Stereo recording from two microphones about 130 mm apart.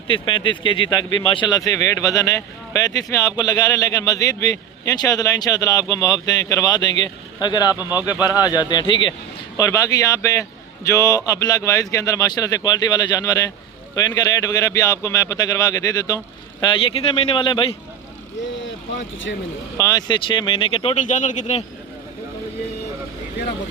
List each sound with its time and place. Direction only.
0.1 s speech: 40° left (ahead or behind)
7.8 s speech: 15° right (ahead or behind)
8.0 s speech: 30° left (ahead or behind)
9.6 s speech: 25° left (ahead or behind)
16.8 s speech: 45° left (ahead or behind)
19.7 s speech: 25° left (ahead or behind)
20.2 s speech: 40° left (ahead or behind)
20.9 s speech: 70° left (ahead or behind)